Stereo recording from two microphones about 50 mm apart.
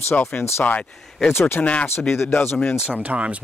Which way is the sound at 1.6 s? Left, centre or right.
Left.